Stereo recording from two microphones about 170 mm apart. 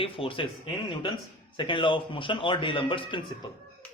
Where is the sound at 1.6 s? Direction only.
30° left (ahead or behind).